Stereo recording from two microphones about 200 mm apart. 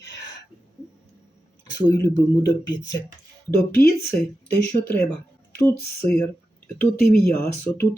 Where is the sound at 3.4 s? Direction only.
10° left (ahead or behind).